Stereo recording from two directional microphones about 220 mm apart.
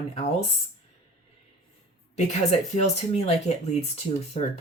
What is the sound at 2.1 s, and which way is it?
Speech, 30° left (ahead or behind).